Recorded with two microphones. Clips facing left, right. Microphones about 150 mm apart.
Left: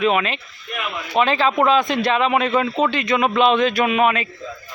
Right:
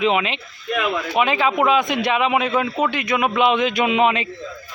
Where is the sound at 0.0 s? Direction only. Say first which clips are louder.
Even; 20° right (ahead or behind).